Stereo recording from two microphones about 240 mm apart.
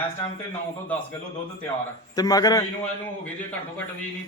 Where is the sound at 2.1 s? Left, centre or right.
Centre.